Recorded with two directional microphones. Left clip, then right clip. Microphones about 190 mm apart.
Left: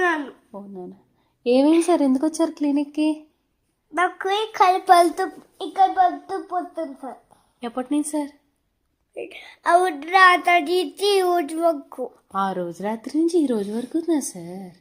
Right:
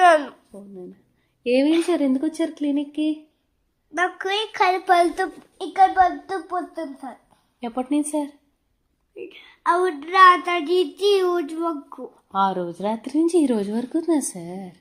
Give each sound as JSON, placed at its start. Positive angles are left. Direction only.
{"t": 0.5, "sound": "a woman's voice", "side_deg": 30}
{"t": 1.5, "sound": "a child's voice", "side_deg": 0}
{"t": 1.9, "sound": "speech", "side_deg": 30}
{"t": 3.9, "sound": "a child's voice", "side_deg": 5}
{"t": 5.1, "sound": "a child's voice", "side_deg": 5}
{"t": 9.1, "sound": "a woman's voice", "side_deg": 40}
{"t": 12.3, "sound": "a woman's voice", "side_deg": -5}